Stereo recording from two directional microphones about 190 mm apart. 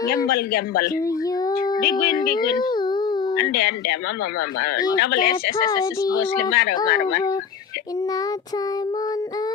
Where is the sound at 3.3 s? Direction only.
55° left (ahead or behind).